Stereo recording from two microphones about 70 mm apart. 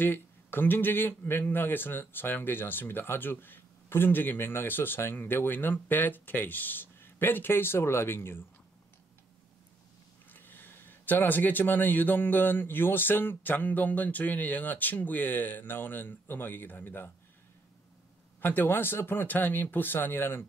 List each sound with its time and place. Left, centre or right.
0.0 s speech: left
10.3 s speech: left
18.4 s speech: left